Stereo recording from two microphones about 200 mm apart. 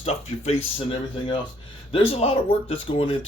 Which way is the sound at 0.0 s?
30° left (ahead or behind).